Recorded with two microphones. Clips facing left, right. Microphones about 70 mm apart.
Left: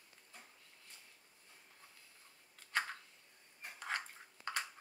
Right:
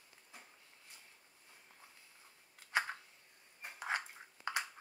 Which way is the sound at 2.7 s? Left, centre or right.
Centre.